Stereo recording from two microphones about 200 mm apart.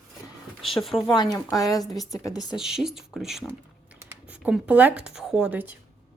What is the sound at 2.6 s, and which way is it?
Speech, centre (ahead or behind).